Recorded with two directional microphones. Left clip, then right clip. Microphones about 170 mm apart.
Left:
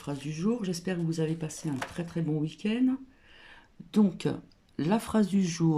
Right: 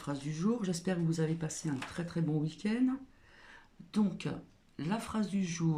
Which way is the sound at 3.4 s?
15° left (ahead or behind).